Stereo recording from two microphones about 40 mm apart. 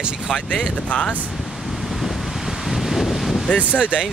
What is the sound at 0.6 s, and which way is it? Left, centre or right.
Speech, left.